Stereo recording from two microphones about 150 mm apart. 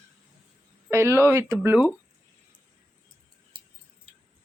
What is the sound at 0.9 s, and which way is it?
Speech, 15° right (ahead or behind).